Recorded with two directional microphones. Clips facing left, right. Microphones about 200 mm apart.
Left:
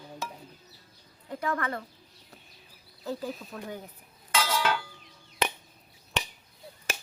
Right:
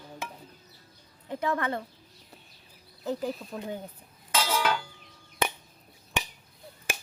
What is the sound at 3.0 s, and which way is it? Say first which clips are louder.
Speech: right 3 dB; 20° right (ahead or behind).